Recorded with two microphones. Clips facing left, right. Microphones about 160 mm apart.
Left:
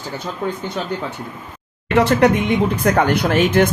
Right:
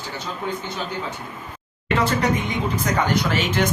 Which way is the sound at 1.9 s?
65° left (ahead or behind).